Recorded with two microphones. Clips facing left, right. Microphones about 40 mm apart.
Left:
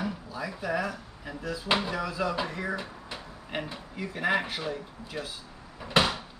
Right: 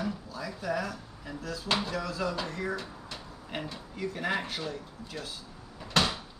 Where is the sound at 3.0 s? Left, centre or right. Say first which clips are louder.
Left 2 dB; centre.